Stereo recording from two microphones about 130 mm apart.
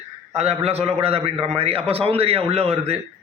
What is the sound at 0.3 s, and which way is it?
A man's voice, 55° right (ahead or behind).